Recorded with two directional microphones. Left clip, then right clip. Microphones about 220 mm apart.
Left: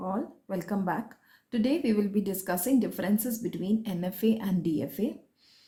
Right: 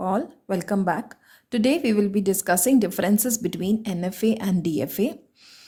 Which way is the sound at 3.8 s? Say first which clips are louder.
Right 5 dB; 25° right (ahead or behind).